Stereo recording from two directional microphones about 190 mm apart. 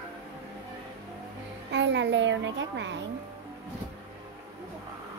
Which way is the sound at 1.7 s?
70° right (ahead or behind).